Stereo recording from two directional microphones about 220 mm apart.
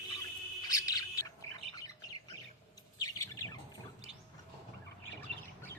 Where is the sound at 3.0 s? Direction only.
15° left (ahead or behind).